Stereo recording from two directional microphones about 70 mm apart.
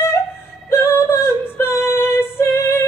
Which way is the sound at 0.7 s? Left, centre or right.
Left.